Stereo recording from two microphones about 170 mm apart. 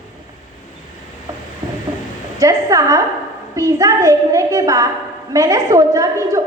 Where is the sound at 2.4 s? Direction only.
20° right (ahead or behind).